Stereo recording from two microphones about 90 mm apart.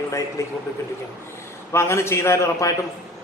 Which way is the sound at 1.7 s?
30° left (ahead or behind).